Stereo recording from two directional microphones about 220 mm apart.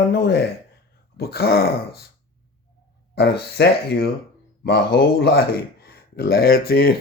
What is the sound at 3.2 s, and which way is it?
Speech, 45° left (ahead or behind).